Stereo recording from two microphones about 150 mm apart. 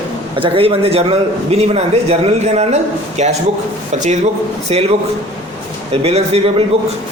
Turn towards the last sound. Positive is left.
turn(degrees=-45)  # may be behind; listen again after turning